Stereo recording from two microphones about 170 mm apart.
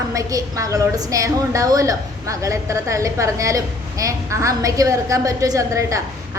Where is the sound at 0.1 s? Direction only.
20° right (ahead or behind).